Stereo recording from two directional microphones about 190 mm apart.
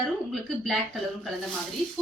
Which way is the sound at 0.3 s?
Centre (ahead or behind).